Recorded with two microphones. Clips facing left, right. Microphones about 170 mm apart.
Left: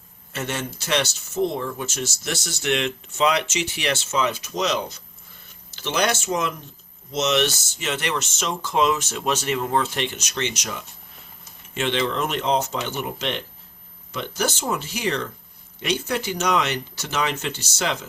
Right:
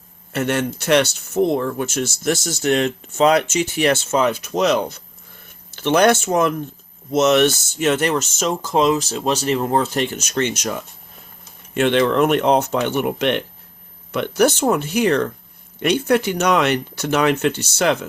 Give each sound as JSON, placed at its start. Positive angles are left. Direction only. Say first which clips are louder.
{"t": 0.3, "sound": "speech", "louder": "right 8 dB", "side_deg": -60}